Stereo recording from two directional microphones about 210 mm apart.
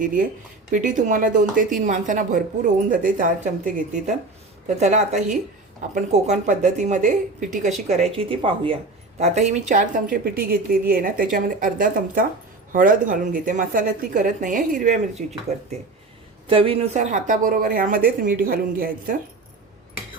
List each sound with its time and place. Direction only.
0.0 s a woman's voice: 40° right (ahead or behind)
4.7 s a woman's voice: 35° right (ahead or behind)
16.5 s a woman's voice: 25° right (ahead or behind); by 19.1 s 45° right (ahead or behind)